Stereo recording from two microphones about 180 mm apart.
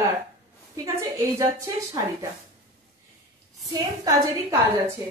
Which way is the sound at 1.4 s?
20° right (ahead or behind).